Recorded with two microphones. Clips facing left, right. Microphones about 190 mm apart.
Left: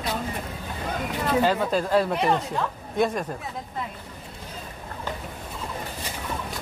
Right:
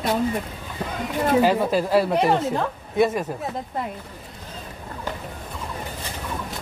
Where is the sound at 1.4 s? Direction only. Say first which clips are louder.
Right 1 dB; 10° right (ahead or behind).